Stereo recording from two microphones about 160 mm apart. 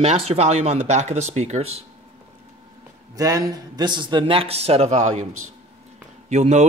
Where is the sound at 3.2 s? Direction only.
20° right (ahead or behind); by 5.2 s 45° right (ahead or behind).